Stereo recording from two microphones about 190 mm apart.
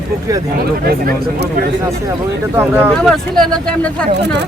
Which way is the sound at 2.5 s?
10° right (ahead or behind).